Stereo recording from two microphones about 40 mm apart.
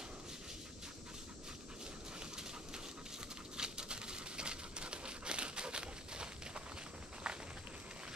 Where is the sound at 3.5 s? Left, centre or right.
Centre.